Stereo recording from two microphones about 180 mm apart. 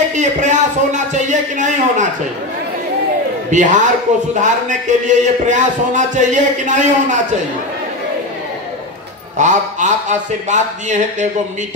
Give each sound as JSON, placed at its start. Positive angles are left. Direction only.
{"t": 0.1, "sound": "speech", "side_deg": -45}
{"t": 3.4, "sound": "a man's voice", "side_deg": -45}
{"t": 9.4, "sound": "speech", "side_deg": -45}